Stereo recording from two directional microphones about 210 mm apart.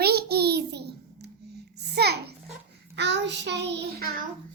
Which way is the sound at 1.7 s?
50° right (ahead or behind).